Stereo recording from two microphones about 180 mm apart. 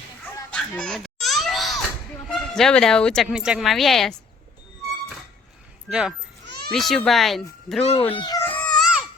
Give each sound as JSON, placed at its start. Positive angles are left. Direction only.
{"t": 0.5, "sound": "children playing", "side_deg": 5}
{"t": 2.3, "sound": "speech", "side_deg": 5}
{"t": 5.9, "sound": "speech", "side_deg": -5}
{"t": 6.4, "sound": "baby cry", "side_deg": -65}
{"t": 6.7, "sound": "speech", "side_deg": 0}
{"t": 8.1, "sound": "baby cry", "side_deg": 20}